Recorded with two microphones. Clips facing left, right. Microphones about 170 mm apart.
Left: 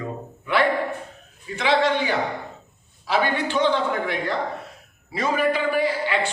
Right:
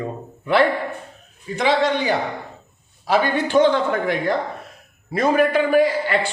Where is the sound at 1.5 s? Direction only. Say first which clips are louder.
Right 2 dB; 40° right (ahead or behind).